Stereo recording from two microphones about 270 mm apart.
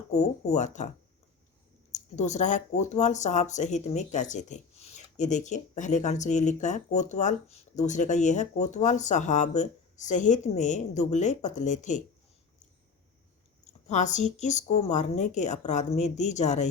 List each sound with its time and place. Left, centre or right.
0.1 s speech: left
1.9 s speech: left
13.8 s speech: left